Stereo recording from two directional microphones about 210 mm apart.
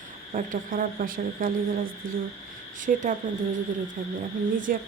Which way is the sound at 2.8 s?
35° right (ahead or behind).